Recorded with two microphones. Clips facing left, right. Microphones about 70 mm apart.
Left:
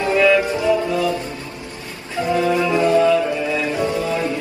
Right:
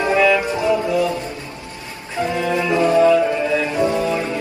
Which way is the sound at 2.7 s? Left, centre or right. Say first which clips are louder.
Right 3 dB; right.